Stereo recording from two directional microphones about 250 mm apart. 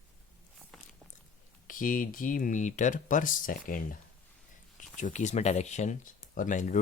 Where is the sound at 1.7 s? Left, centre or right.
Left.